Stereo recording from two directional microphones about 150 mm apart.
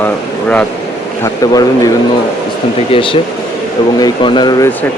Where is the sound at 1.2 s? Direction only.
25° left (ahead or behind).